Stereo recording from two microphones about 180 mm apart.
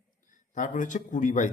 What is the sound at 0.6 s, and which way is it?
Speech, 45° left (ahead or behind).